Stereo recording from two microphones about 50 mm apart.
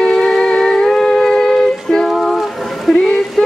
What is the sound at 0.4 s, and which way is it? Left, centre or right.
Music, centre.